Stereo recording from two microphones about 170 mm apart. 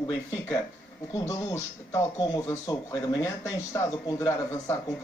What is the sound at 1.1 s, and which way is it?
Speech, 20° left (ahead or behind).